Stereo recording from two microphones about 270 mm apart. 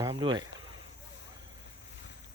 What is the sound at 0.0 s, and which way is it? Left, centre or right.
Speech, centre.